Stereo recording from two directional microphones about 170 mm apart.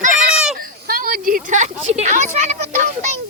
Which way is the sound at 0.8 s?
55° right (ahead or behind).